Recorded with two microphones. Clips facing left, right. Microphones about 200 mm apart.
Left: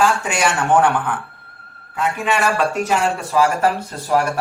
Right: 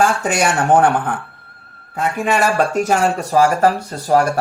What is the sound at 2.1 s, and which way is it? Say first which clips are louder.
Speech: right 4 dB; 40° right (ahead or behind).